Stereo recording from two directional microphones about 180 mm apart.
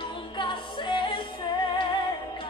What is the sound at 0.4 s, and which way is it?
Music, 25° left (ahead or behind).